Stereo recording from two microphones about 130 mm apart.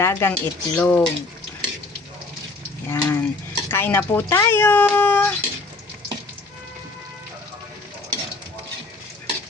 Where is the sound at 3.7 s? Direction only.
15° left (ahead or behind).